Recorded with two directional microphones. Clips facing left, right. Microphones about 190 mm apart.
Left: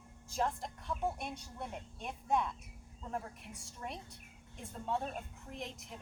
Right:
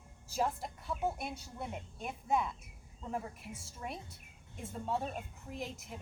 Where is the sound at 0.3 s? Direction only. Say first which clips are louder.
Right 1 dB; 5° right (ahead or behind).